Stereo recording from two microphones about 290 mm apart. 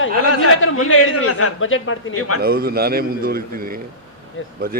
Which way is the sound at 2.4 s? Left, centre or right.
Right.